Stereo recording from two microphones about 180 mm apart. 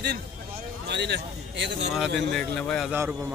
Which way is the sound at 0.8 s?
70° right (ahead or behind).